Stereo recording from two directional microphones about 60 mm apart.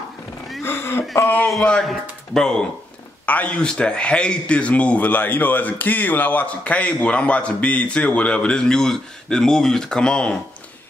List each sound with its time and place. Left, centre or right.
0.7 s a sound: left
1.2 s a man's voice: left
1.9 s speech: centre
3.3 s a man's voice: left